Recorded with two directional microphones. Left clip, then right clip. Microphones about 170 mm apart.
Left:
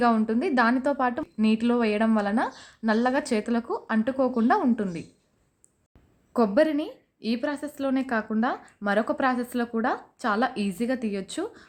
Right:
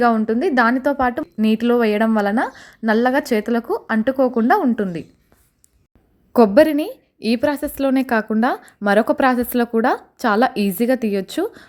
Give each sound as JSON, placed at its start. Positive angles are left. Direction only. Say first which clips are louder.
{"t": 0.0, "sound": "a woman's voice", "louder": "right 7 dB", "side_deg": -20}
{"t": 6.3, "sound": "a woman's voice", "louder": "right 9 dB", "side_deg": -40}